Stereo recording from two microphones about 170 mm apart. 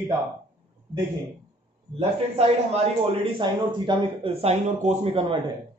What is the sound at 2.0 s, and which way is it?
A man's voice, 35° right (ahead or behind).